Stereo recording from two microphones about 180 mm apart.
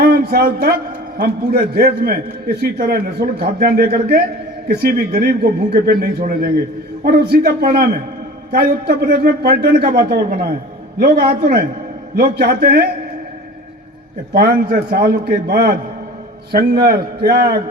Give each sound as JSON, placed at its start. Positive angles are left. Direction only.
{"t": 0.1, "sound": "a man's voice", "side_deg": -55}
{"t": 14.3, "sound": "a man's voice", "side_deg": -55}